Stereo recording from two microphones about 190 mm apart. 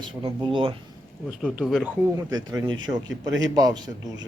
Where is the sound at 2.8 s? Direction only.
20° right (ahead or behind).